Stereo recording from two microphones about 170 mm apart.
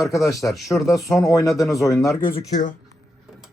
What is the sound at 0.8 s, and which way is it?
Speech, 20° left (ahead or behind).